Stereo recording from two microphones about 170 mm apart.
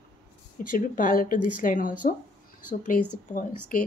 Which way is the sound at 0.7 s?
55° left (ahead or behind).